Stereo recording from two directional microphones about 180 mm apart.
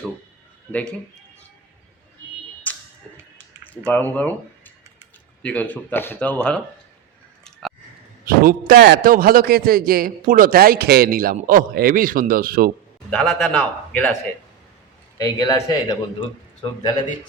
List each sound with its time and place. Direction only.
0.7 s speech: 5° left (ahead or behind)
2.7 s a sound: 10° left (ahead or behind)
3.7 s speech: 10° left (ahead or behind)
8.2 s a man's voice: 55° right (ahead or behind)
13.1 s a man's voice: 5° left (ahead or behind)
15.2 s speech: 20° left (ahead or behind)